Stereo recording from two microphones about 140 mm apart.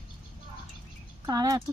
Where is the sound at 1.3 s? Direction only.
25° right (ahead or behind).